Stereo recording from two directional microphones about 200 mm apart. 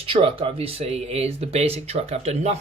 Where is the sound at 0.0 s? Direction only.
30° right (ahead or behind).